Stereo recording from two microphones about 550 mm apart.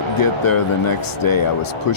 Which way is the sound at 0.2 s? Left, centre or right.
Left.